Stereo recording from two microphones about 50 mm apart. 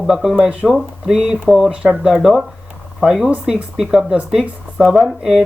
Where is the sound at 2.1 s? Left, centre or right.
Centre.